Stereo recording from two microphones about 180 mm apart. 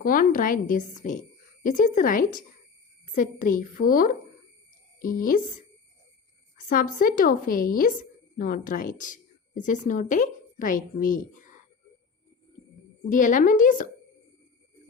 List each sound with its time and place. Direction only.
0.0 s a woman's voice: 50° left (ahead or behind)
6.7 s a woman's voice: 50° left (ahead or behind)
13.1 s a woman's voice: 45° left (ahead or behind)